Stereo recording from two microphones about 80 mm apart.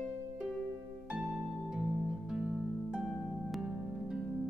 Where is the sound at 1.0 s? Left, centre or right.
Centre.